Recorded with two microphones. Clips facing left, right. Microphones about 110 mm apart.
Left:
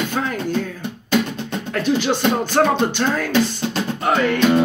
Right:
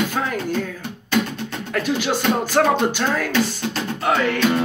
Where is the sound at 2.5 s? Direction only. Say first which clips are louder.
Even; centre (ahead or behind).